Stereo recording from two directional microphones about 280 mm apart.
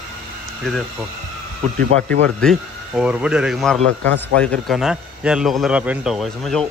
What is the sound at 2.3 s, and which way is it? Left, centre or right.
Speech, centre.